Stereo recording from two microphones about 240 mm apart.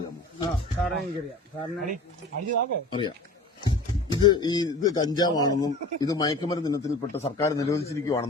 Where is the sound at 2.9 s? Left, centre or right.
Centre.